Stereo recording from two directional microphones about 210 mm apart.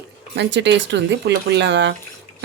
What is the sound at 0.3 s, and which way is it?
Speech, 55° right (ahead or behind).